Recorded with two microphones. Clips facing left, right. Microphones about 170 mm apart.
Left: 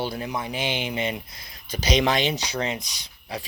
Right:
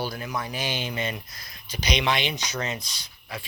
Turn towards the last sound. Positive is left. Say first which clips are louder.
# left 4 dB
turn(degrees=35)  # may be behind; listen again after turning